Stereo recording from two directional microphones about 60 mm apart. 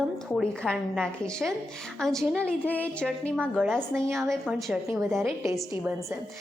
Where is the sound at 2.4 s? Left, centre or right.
Left.